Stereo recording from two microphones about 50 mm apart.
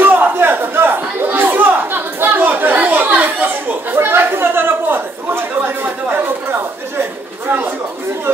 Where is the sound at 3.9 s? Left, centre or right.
Right.